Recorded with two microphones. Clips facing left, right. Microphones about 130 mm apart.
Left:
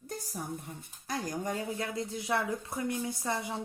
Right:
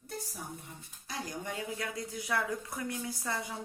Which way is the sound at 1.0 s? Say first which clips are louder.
Left 5 dB; 45° left (ahead or behind).